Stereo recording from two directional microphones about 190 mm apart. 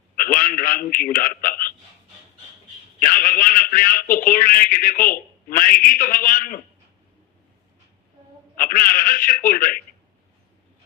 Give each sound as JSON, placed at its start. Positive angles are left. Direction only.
{"t": 0.2, "sound": "telephone", "side_deg": 45}
{"t": 3.0, "sound": "a man's voice", "side_deg": 45}
{"t": 8.5, "sound": "a man's voice", "side_deg": 45}